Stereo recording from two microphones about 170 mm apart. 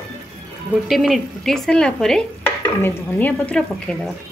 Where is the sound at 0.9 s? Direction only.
Centre (ahead or behind).